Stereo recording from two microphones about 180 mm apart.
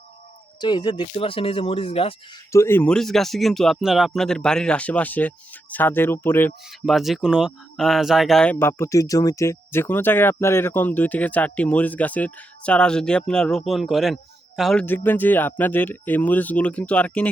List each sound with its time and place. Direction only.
0.6 s speech: 25° left (ahead or behind)
2.5 s speech: 15° left (ahead or behind)
6.7 s speech: centre (ahead or behind)